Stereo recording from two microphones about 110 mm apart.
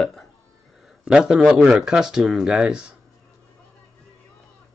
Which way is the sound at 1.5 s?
10° right (ahead or behind).